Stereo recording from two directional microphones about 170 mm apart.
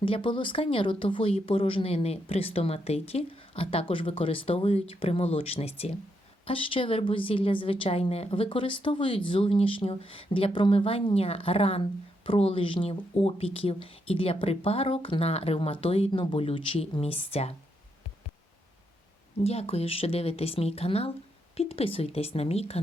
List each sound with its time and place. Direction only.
0.0 s speech: 30° left (ahead or behind)
19.5 s speech: 35° left (ahead or behind)